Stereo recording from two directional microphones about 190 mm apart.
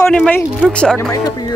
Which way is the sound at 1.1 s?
20° left (ahead or behind).